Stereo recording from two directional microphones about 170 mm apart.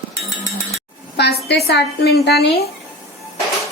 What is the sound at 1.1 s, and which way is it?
A woman's voice, 75° left (ahead or behind).